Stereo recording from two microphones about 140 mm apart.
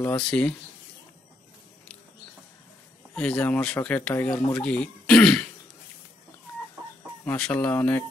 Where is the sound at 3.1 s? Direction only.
5° left (ahead or behind).